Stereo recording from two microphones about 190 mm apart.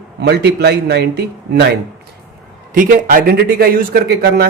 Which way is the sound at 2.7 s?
45° right (ahead or behind).